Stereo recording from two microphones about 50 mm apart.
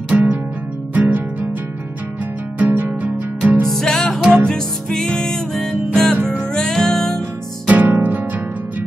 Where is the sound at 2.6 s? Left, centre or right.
Right.